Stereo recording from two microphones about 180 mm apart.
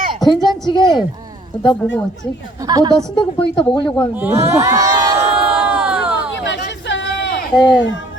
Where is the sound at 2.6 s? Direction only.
20° right (ahead or behind).